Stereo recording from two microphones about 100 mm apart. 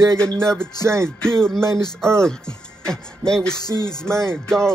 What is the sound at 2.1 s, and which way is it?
Speech, 5° left (ahead or behind).